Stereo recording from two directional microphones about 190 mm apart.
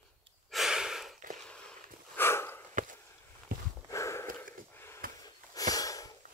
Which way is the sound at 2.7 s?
45° right (ahead or behind).